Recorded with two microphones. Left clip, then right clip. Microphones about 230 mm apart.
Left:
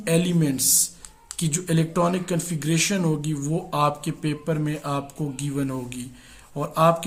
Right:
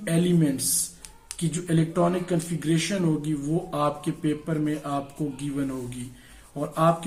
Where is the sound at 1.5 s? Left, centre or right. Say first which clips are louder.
Left 1 dB; left.